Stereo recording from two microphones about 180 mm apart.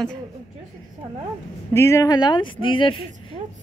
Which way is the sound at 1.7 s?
15° left (ahead or behind).